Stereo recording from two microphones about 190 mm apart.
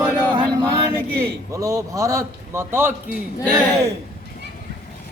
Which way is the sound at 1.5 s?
15° right (ahead or behind).